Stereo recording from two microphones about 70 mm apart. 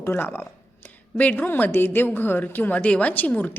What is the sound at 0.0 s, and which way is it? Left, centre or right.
Speech, left.